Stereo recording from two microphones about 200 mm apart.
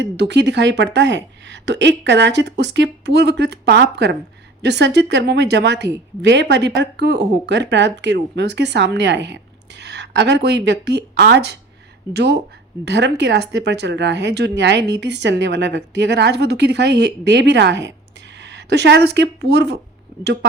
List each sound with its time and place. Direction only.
0.0 s speech: 60° right (ahead or behind)